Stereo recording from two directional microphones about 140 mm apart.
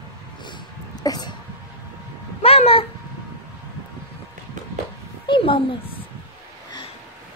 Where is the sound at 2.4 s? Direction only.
45° left (ahead or behind).